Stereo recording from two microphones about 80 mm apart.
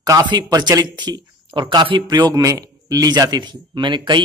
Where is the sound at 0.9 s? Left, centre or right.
Right.